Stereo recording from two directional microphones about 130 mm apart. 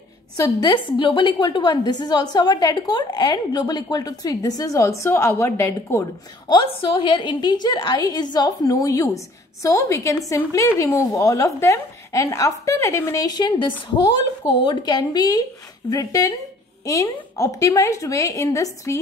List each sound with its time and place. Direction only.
0.4 s a woman's voice: 30° left (ahead or behind)
6.5 s a woman's voice: 40° left (ahead or behind); by 18.9 s 25° left (ahead or behind)